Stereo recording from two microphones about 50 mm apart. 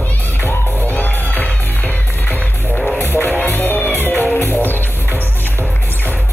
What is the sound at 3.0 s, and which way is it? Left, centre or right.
Music, left.